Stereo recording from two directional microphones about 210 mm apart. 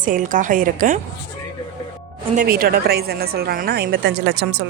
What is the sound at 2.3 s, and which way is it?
A woman's voice, 45° right (ahead or behind).